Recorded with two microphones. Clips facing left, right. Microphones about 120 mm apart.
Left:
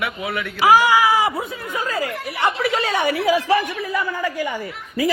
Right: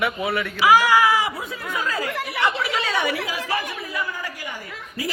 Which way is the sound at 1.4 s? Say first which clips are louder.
Left 1 dB; 45° left (ahead or behind).